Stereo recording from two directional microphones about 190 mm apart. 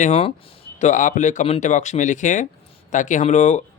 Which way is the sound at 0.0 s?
35° left (ahead or behind).